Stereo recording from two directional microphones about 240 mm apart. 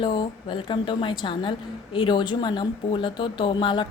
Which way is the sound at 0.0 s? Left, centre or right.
Centre.